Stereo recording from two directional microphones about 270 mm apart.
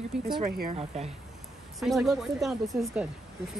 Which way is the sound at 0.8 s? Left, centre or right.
Right.